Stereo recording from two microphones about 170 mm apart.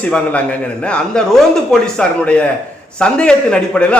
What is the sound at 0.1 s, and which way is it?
A man's voice, 5° left (ahead or behind).